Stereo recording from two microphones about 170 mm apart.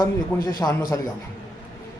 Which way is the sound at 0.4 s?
20° left (ahead or behind).